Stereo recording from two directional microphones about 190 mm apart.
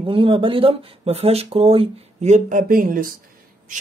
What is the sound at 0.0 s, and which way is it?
Speech, 25° right (ahead or behind).